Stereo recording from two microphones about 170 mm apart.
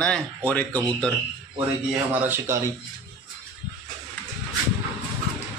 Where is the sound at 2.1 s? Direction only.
10° right (ahead or behind).